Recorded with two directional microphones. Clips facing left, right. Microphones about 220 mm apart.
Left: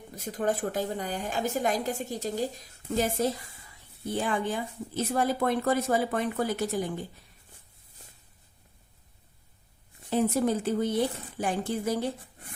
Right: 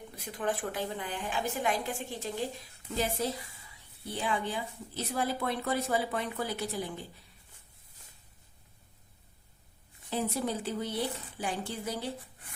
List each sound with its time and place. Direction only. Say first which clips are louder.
0.1 s a woman's voice: left 5 dB; 40° left (ahead or behind)
10.1 s a woman's voice: left 7 dB; 50° left (ahead or behind)